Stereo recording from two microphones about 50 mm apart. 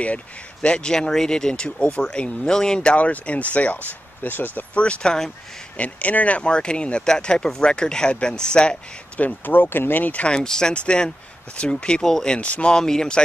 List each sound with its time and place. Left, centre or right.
0.0 s speech: left
3.1 s speech: left
4.7 s speech: left
9.2 s speech: left
10.2 s speech: centre
12.4 s speech: left
12.7 s speech: centre